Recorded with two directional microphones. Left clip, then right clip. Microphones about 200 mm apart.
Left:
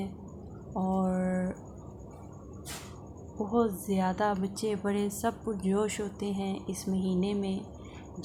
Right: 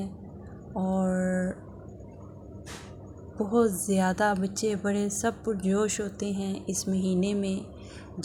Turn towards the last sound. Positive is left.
turn(degrees=-15)  # may be behind; listen again after turning